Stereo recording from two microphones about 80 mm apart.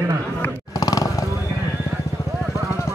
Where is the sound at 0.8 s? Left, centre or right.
Left.